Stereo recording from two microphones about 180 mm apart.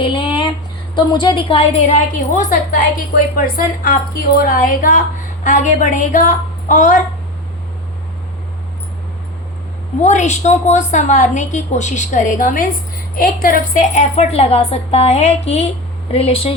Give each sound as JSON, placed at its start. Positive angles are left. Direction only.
{"t": 0.0, "sound": "a sound", "side_deg": 30}
{"t": 0.9, "sound": "a woman's voice", "side_deg": 25}
{"t": 2.1, "sound": "a woman's voice", "side_deg": 45}
{"t": 10.0, "sound": "a woman's voice", "side_deg": 40}